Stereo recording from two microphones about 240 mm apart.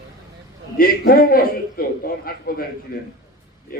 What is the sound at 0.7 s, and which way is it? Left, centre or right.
A man's voice, left.